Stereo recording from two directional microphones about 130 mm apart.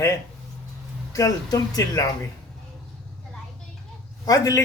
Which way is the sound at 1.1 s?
25° left (ahead or behind).